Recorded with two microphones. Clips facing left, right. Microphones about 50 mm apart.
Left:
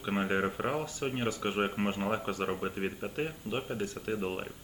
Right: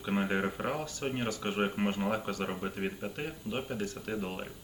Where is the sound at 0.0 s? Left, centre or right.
Left.